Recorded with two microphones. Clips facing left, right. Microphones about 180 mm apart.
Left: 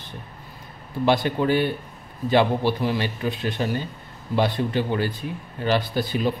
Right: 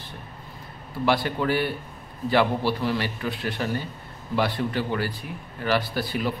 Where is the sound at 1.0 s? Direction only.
20° left (ahead or behind).